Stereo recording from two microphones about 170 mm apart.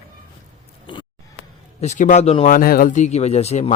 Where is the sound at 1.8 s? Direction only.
45° left (ahead or behind).